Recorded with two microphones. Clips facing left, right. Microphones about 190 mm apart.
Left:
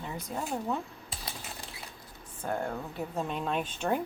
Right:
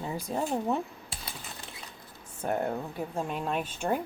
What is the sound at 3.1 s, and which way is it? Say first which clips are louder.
Speech: even; 10° right (ahead or behind).